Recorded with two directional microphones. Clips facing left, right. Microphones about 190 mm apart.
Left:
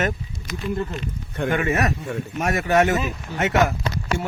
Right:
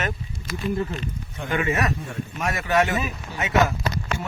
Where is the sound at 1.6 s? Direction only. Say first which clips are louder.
Right 2 dB; 45° left (ahead or behind).